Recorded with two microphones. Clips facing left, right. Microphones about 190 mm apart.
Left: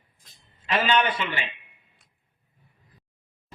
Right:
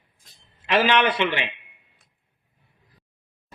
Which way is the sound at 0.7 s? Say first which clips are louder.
Right 3 dB; 90° right.